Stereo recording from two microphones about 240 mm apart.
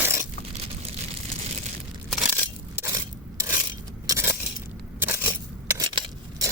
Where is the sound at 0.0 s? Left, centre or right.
Centre.